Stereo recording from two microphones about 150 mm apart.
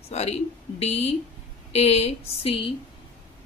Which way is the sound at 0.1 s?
45° left (ahead or behind).